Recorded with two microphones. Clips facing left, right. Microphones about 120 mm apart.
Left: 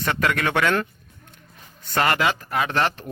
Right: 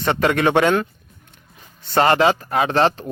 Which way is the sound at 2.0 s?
30° right (ahead or behind).